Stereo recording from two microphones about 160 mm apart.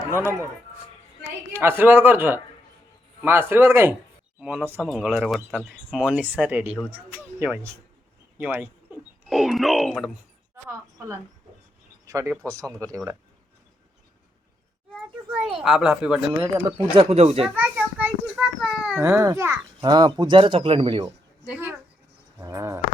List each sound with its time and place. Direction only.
0.1 s speech: 15° right (ahead or behind)
1.5 s speech: 15° right (ahead or behind)
9.3 s speech: centre (ahead or behind)
12.0 s a child's voice: 20° right (ahead or behind)
14.9 s a woman's voice: 5° right (ahead or behind)
16.6 s speech: 30° right (ahead or behind)
17.5 s children playing: 10° right (ahead or behind)
18.7 s a sound: 5° right (ahead or behind)
19.0 s a child's voice: 20° right (ahead or behind)
22.4 s a sound: 15° right (ahead or behind)